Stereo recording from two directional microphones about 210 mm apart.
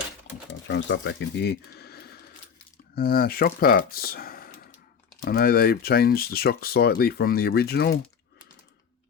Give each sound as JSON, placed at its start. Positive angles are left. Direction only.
{"t": 0.7, "sound": "speech", "side_deg": 60}